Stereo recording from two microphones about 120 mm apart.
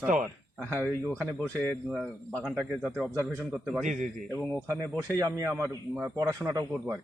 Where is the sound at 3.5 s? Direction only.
Centre (ahead or behind).